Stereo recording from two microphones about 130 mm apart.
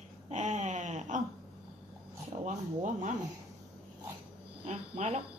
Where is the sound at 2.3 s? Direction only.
65° right (ahead or behind).